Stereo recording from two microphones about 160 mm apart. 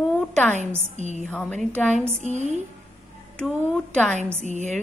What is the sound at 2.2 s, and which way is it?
Speech, 45° right (ahead or behind).